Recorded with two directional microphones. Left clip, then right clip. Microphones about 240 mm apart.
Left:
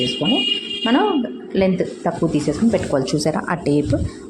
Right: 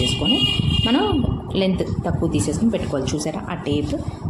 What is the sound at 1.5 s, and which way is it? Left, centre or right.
Speech, centre.